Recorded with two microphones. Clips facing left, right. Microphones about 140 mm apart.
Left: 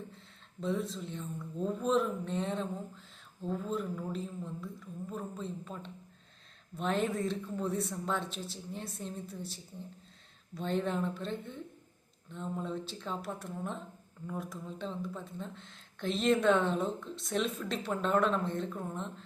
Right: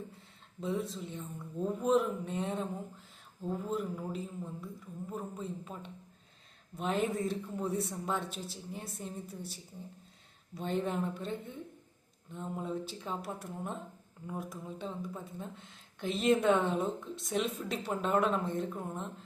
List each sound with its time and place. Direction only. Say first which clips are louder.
0.6 s speech: left 1 dB; 10° right (ahead or behind)